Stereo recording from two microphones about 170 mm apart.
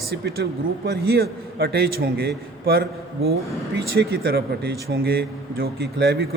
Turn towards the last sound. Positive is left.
turn(degrees=-75)  # may be behind; listen again after turning